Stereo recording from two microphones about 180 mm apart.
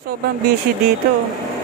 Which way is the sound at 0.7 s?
55° right (ahead or behind).